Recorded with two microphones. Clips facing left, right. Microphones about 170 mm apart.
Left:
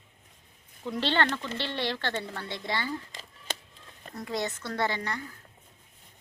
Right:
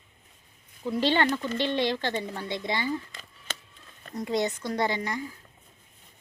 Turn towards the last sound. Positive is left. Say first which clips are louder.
# right 2 dB
turn(degrees=-10)  # may be behind; listen again after turning